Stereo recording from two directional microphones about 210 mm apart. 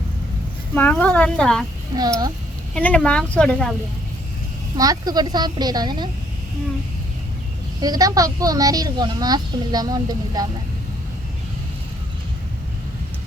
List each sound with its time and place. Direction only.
0.7 s speech: 10° left (ahead or behind)
2.0 s speech: 15° right (ahead or behind)
2.7 s speech: 5° left (ahead or behind)
4.8 s speech: 15° right (ahead or behind)
7.8 s speech: 20° right (ahead or behind)